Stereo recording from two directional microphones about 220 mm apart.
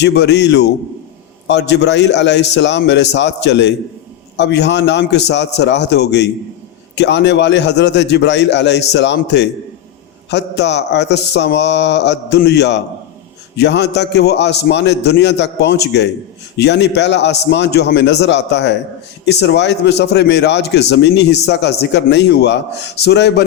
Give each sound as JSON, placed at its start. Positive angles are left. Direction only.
{"t": 0.0, "sound": "a man's voice", "side_deg": 50}